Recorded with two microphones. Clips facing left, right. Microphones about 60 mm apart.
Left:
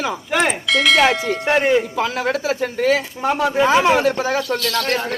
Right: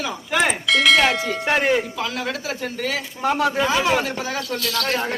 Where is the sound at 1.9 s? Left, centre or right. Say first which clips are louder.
Left 6 dB; left.